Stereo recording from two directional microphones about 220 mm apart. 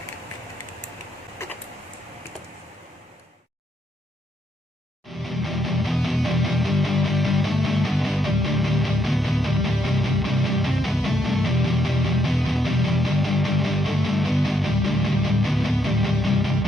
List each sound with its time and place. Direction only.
5.0 s music: centre (ahead or behind)